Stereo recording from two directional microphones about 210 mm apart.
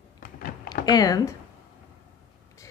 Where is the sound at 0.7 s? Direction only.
20° left (ahead or behind).